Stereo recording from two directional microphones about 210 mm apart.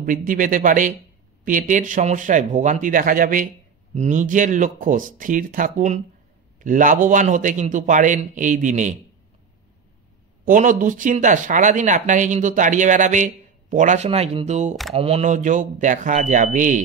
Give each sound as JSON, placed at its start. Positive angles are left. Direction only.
{"t": 0.0, "sound": "speech", "side_deg": -40}
{"t": 10.4, "sound": "speech", "side_deg": -40}